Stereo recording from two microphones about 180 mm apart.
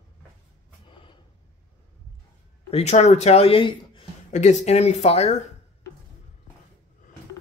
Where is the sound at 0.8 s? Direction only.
25° left (ahead or behind).